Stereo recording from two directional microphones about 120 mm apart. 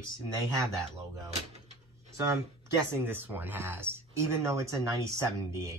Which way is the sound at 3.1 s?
15° right (ahead or behind).